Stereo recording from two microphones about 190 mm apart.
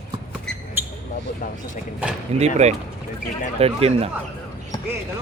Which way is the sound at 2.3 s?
35° right (ahead or behind).